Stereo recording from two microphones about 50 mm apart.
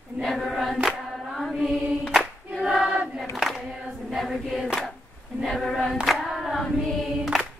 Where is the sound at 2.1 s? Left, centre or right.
Centre.